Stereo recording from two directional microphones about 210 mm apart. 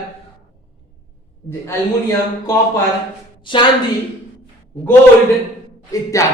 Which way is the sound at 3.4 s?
25° left (ahead or behind).